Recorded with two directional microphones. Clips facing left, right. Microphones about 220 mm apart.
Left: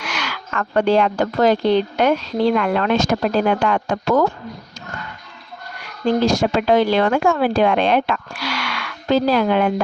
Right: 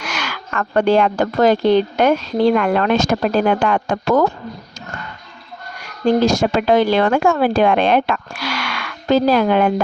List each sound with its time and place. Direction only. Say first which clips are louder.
0.0 s speech: right 1 dB; 45° right (ahead or behind)
5.8 s speech: right 3 dB; 45° right (ahead or behind)